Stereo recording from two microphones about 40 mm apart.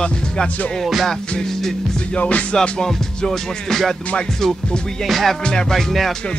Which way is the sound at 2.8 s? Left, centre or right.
Centre.